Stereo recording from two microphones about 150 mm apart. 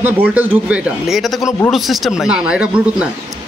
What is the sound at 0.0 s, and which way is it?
Speech, 10° right (ahead or behind).